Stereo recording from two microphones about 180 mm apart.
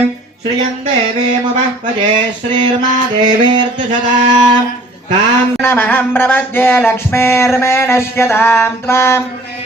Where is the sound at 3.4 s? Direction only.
25° right (ahead or behind).